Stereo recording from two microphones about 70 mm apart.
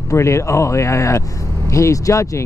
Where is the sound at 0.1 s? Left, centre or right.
Left.